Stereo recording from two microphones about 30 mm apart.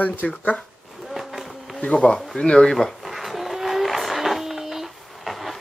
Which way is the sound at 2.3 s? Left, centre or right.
Left.